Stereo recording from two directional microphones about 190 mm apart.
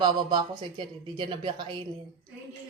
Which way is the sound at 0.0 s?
25° right (ahead or behind).